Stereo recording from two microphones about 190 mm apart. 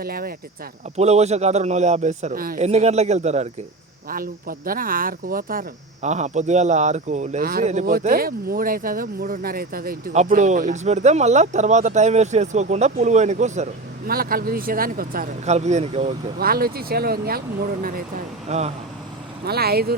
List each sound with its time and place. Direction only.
0.0 s speech: 50° right (ahead or behind)
0.9 s speech: 35° right (ahead or behind)
2.6 s speech: 35° right (ahead or behind)
4.1 s speech: 50° right (ahead or behind)
14.1 s speech: 50° right (ahead or behind); by 16.1 s 35° right (ahead or behind)
16.4 s speech: 50° right (ahead or behind)
18.4 s speech: 35° right (ahead or behind)
19.5 s speech: 55° right (ahead or behind)